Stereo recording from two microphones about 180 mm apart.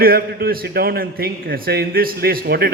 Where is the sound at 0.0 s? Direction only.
55° right (ahead or behind).